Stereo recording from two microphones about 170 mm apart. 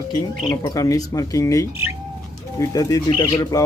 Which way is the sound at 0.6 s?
20° left (ahead or behind).